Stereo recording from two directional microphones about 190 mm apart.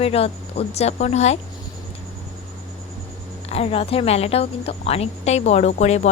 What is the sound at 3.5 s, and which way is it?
Speech, 30° left (ahead or behind).